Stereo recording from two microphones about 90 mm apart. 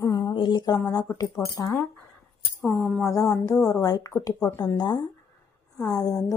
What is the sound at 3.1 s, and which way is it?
Speech, 40° left (ahead or behind).